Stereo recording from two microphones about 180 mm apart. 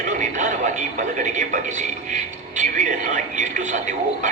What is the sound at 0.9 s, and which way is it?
Speech, 45° right (ahead or behind).